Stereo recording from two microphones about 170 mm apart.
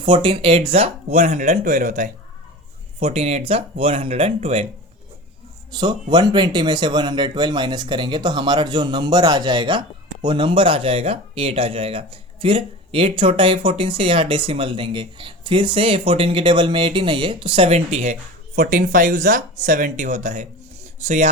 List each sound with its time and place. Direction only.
0.0 s speech: 30° right (ahead or behind)
5.7 s speech: 25° right (ahead or behind); by 21.2 s 45° right (ahead or behind)